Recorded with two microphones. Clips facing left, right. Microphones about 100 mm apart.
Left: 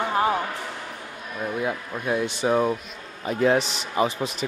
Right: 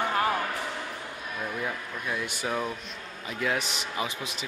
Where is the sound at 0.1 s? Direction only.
20° left (ahead or behind).